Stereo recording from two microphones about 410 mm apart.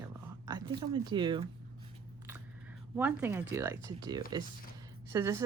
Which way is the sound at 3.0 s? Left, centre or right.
Centre.